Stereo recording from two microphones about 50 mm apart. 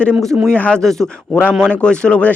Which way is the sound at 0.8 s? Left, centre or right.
Centre.